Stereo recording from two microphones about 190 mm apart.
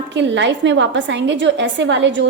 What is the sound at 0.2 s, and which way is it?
A woman's voice, 70° right (ahead or behind).